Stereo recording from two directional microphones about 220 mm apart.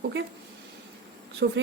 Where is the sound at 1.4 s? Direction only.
50° right (ahead or behind).